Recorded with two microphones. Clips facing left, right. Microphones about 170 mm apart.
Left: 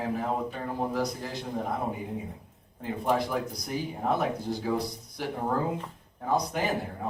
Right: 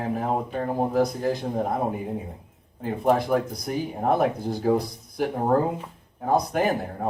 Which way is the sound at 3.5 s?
50° right (ahead or behind).